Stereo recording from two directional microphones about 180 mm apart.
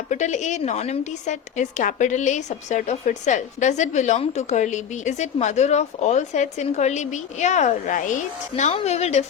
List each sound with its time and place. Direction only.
0.1 s a woman's voice: 40° left (ahead or behind)